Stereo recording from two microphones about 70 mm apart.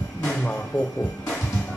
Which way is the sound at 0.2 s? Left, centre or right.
Centre.